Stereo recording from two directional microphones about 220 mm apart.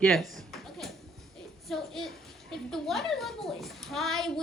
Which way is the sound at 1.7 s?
Centre (ahead or behind).